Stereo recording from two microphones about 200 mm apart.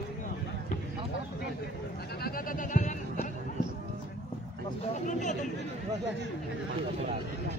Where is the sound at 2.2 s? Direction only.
45° left (ahead or behind).